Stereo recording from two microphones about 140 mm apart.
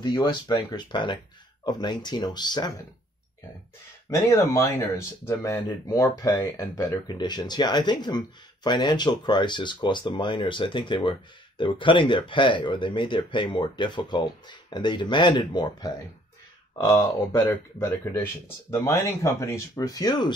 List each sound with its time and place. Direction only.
0.0 s speech: 30° left (ahead or behind)
4.1 s speech: 20° left (ahead or behind)
16.7 s speech: 20° left (ahead or behind)